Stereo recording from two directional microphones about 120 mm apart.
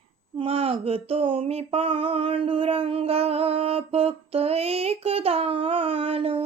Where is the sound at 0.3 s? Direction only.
55° right (ahead or behind).